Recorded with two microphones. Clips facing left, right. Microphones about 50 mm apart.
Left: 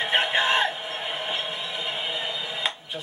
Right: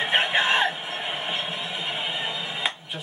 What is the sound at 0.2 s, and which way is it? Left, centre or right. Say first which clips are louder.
Music: right 1 dB; centre.